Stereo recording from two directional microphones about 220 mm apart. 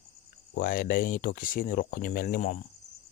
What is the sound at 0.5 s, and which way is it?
Speech, 40° left (ahead or behind).